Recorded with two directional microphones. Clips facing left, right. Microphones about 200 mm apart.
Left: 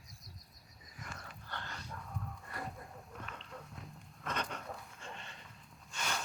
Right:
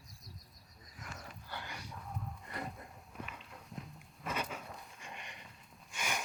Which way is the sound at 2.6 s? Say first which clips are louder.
Right 1 dB; 20° right (ahead or behind).